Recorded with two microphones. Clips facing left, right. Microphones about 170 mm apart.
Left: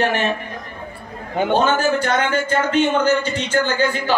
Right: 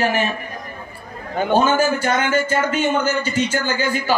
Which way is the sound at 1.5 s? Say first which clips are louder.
Right 1 dB; 5° right (ahead or behind).